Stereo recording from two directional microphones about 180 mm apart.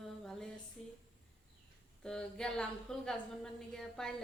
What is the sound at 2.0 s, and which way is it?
A woman's voice, 5° left (ahead or behind).